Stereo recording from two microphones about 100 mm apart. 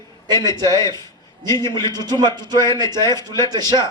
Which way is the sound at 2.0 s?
45° right (ahead or behind).